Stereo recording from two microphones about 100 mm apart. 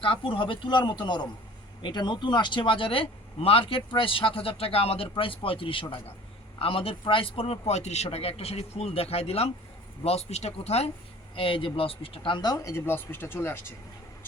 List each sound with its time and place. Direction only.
0.0 s speech: 60° left (ahead or behind)
7.7 s a man's voice: 90° left
11.3 s speech: 60° left (ahead or behind); by 13.7 s 20° left (ahead or behind)